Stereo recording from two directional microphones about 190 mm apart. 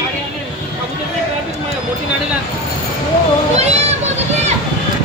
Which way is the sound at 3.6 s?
35° right (ahead or behind).